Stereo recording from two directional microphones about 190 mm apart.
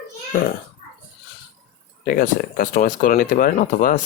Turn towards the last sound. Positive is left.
turn(degrees=45)  # may be behind; listen again after turning